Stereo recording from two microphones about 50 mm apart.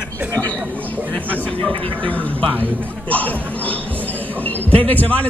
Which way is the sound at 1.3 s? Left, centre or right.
Left.